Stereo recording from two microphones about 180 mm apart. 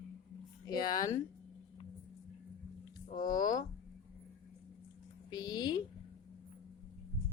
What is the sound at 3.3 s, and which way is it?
Speech, 20° left (ahead or behind).